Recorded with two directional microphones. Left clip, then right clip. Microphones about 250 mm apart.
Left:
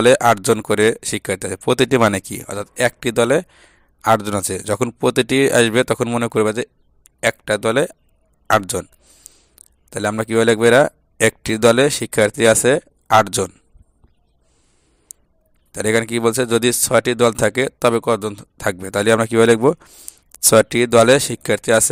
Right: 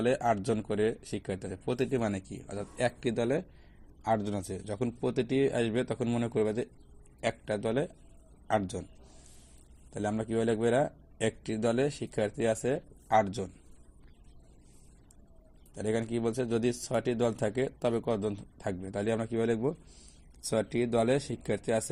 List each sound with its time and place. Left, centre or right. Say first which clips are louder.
0.0 s speech: left 16 dB; left
9.9 s speech: left 14 dB; left
15.7 s speech: left 14 dB; left